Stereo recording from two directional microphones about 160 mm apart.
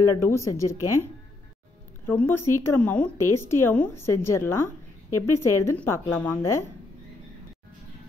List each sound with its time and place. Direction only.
0.0 s a woman's voice: 15° left (ahead or behind)
2.0 s speech: 15° left (ahead or behind)